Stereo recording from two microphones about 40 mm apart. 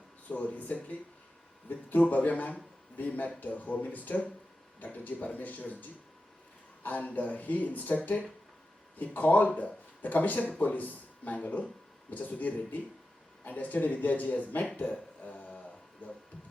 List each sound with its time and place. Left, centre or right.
0.3 s speech: left
14.8 s a sound: left
16.0 s speech: left